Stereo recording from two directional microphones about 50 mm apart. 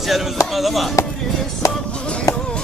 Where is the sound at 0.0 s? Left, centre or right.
Centre.